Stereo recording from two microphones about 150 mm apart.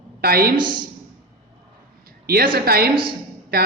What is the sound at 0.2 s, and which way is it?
Speech, 90° right.